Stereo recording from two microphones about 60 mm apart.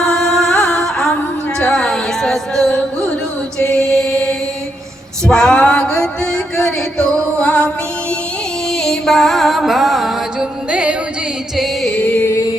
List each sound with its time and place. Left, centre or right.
0.0 s music: centre
3.7 s chant: centre
5.2 s male singing: centre
8.8 s music: centre
10.7 s music: centre
11.5 s music: centre
11.9 s music: left